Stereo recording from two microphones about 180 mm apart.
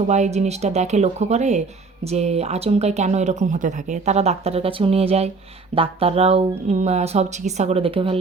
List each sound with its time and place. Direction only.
0.1 s speech: 40° right (ahead or behind)